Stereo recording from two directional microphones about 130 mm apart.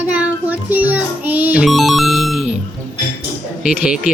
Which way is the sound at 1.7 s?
Centre (ahead or behind).